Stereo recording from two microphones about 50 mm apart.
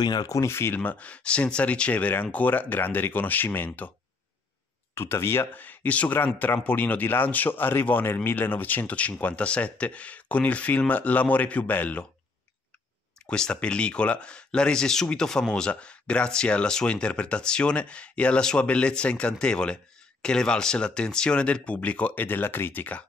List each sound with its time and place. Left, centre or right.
0.4 s speech: left
0.7 s speech: left
4.9 s speech: left
5.5 s speech: left
13.3 s speech: centre
18.4 s speech: centre; by 23.0 s left